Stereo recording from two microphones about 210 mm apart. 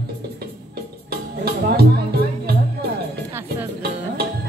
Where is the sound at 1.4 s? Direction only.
50° right (ahead or behind).